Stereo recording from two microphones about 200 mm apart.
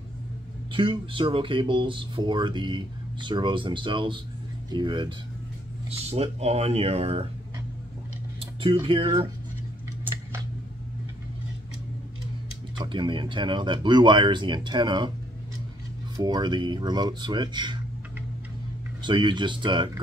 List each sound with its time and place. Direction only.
0.7 s speech: 25° right (ahead or behind)
8.4 s tick: 25° right (ahead or behind)
8.8 s speech: 25° right (ahead or behind)
12.7 s speech: 25° right (ahead or behind)
16.2 s speech: 20° right (ahead or behind)
19.0 s speech: 20° right (ahead or behind)